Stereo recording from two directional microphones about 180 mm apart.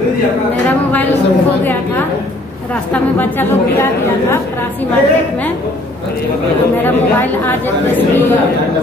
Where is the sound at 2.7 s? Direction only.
10° left (ahead or behind).